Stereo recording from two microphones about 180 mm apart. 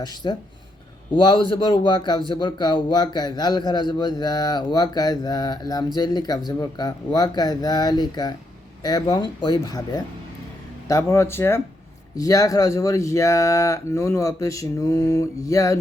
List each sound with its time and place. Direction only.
0.0 s a man's voice: 25° left (ahead or behind)